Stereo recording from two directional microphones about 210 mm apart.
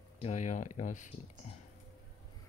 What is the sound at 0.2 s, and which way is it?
Speech, 35° left (ahead or behind).